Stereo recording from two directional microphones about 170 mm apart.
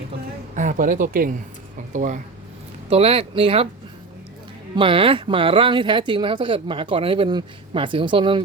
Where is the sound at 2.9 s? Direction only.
35° right (ahead or behind).